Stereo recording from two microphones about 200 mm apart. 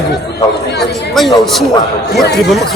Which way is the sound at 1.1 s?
Centre (ahead or behind).